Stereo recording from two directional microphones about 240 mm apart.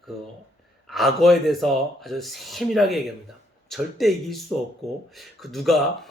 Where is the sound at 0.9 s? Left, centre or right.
Centre.